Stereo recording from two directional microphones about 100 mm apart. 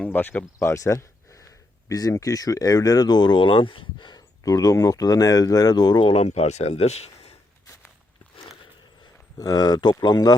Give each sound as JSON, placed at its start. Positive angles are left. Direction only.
{"t": 0.0, "sound": "speech", "side_deg": 20}
{"t": 6.1, "sound": "speech", "side_deg": 90}
{"t": 9.4, "sound": "speech", "side_deg": 40}